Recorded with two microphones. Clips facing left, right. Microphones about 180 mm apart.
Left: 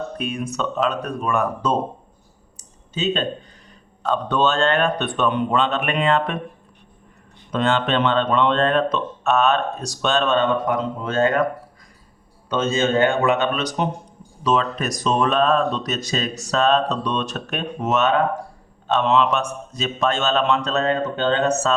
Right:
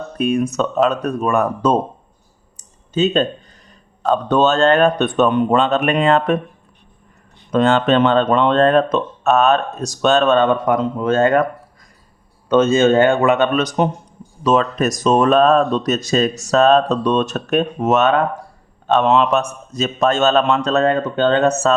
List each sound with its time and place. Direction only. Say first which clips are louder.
0.2 s speech: right 11 dB; 45° right (ahead or behind)
2.6 s clicking: right 10 dB; 50° right (ahead or behind)
4.0 s speech: right 5 dB; 40° right (ahead or behind)
7.5 s speech: right 6 dB; 45° right (ahead or behind)
12.5 s speech: right 8 dB; 55° right (ahead or behind)